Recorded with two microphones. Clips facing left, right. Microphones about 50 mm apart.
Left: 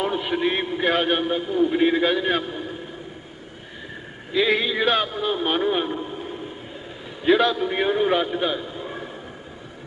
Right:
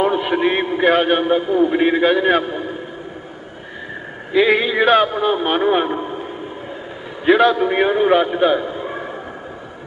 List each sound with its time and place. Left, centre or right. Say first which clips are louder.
0.0 s a man's voice: right 6 dB; right
4.3 s a man's voice: right 6 dB; right